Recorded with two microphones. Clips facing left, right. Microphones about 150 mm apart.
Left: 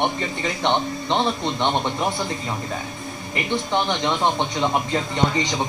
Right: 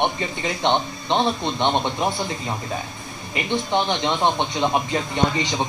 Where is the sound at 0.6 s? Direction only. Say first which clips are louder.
Right 1 dB; 15° right (ahead or behind).